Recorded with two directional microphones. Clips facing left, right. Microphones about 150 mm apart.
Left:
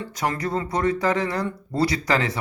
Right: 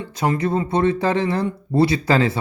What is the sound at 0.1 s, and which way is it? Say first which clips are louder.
Speech: right 6 dB; 25° right (ahead or behind).